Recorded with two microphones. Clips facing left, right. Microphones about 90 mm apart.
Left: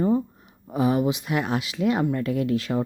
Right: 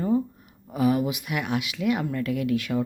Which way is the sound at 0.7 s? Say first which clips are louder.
Left 1 dB; 25° left (ahead or behind).